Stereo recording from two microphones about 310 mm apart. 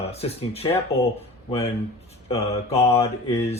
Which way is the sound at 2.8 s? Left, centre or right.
Centre.